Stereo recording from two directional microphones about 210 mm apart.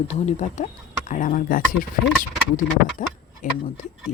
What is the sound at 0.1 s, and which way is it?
Speech, 30° left (ahead or behind).